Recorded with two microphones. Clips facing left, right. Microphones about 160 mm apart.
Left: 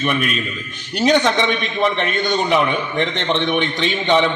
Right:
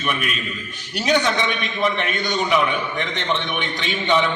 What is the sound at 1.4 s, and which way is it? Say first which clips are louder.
A man's voice: left 4 dB; 25° left (ahead or behind).